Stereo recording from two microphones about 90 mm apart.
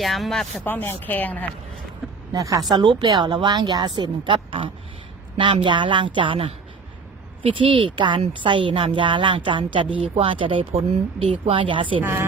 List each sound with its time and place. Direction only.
0.0 s speech: centre (ahead or behind)
0.6 s speech: 20° left (ahead or behind)
2.3 s a woman's voice: 40° right (ahead or behind); by 12.0 s 70° right (ahead or behind)